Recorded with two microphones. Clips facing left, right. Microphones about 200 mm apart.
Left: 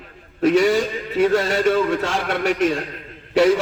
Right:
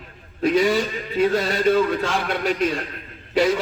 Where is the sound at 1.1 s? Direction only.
80° left.